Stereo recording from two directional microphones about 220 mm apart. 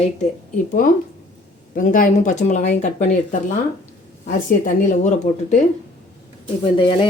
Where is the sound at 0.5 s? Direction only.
40° left (ahead or behind).